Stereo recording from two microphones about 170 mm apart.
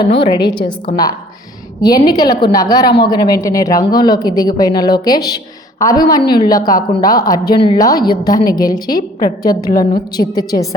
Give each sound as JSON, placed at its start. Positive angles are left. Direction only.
{"t": 0.0, "sound": "a woman's voice", "side_deg": 30}